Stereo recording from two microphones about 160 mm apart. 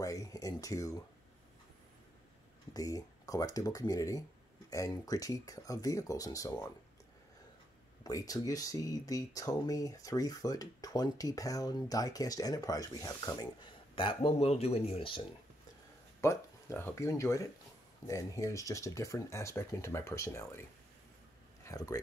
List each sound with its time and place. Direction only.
0.0 s speech: 20° left (ahead or behind)
2.7 s speech: 20° left (ahead or behind)
8.0 s speech: 20° left (ahead or behind)
13.9 s speech: 35° left (ahead or behind)
16.2 s speech: 15° left (ahead or behind)
21.6 s speech: 20° left (ahead or behind)